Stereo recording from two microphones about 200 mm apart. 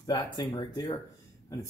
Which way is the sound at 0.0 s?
20° left (ahead or behind).